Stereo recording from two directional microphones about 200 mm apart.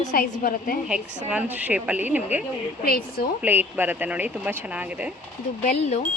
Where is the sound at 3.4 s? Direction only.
10° right (ahead or behind).